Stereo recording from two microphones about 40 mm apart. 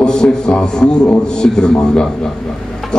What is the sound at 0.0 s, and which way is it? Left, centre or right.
A man's voice, centre.